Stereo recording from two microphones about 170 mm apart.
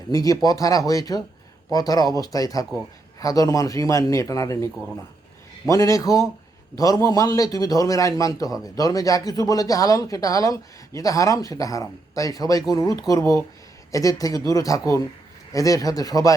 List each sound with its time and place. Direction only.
0.1 s speech: 20° left (ahead or behind)